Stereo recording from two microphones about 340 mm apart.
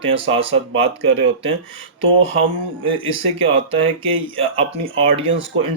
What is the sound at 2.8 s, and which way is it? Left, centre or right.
Speech, centre.